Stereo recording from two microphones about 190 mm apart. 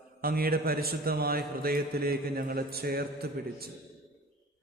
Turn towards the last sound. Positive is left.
turn(degrees=-55)  # may be behind; listen again after turning